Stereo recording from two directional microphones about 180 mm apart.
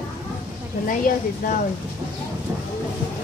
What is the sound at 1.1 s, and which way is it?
Speech, 50° left (ahead or behind).